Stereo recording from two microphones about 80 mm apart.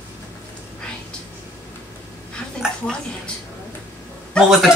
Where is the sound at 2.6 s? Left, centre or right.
Centre.